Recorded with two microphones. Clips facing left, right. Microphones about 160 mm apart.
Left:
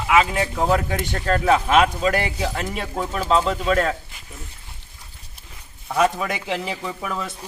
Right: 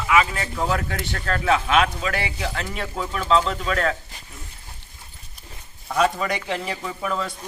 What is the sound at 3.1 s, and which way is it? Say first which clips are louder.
Speech: even; 35° left (ahead or behind).